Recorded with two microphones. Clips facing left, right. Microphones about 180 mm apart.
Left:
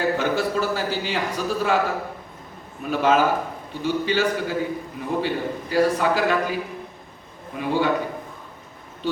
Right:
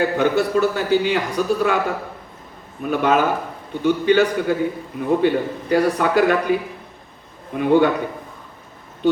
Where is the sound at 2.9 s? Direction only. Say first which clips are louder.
Right 1 dB; 55° right (ahead or behind).